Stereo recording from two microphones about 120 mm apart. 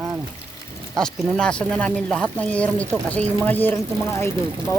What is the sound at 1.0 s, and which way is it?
Speech, 5° left (ahead or behind).